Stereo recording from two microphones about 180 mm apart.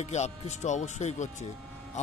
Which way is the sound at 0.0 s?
40° left (ahead or behind).